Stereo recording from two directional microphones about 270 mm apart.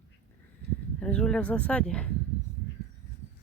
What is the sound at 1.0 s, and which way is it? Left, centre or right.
Speech, centre.